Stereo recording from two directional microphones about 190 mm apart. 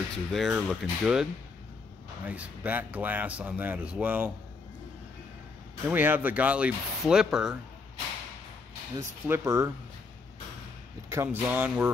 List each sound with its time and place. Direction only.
0.3 s speech: centre (ahead or behind)
2.2 s speech: 10° right (ahead or behind)
5.9 s speech: 10° right (ahead or behind)
8.9 s speech: 15° right (ahead or behind)
11.1 s speech: 10° right (ahead or behind)